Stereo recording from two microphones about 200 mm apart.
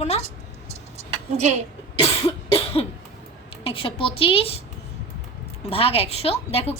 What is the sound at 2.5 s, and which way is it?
Cough, 30° left (ahead or behind).